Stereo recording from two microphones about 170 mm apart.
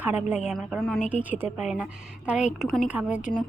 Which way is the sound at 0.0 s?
10° right (ahead or behind).